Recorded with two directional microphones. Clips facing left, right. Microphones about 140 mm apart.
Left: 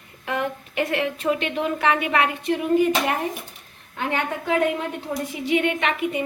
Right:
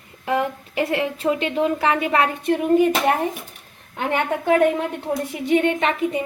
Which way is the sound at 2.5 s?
50° right (ahead or behind).